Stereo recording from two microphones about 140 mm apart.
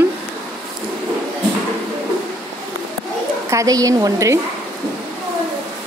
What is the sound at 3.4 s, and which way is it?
Speech, 25° right (ahead or behind).